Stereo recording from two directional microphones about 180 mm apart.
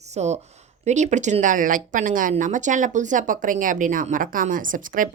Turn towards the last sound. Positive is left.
turn(degrees=-50)  # may be behind; listen again after turning